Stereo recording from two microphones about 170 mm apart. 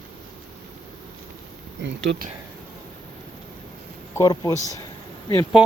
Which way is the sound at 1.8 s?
90° right.